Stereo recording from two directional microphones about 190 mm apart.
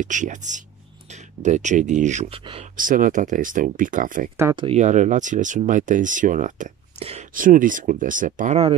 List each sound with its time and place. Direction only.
0.0 s speech: 40° right (ahead or behind)
2.7 s speech: 45° right (ahead or behind)
4.4 s speech: 15° right (ahead or behind)
4.6 s speech: 40° right (ahead or behind)